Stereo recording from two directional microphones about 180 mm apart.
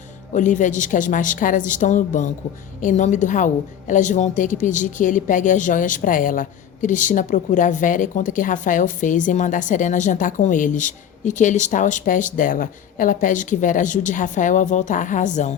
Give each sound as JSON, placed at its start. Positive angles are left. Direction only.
{"t": 0.3, "sound": "a woman's voice", "side_deg": 45}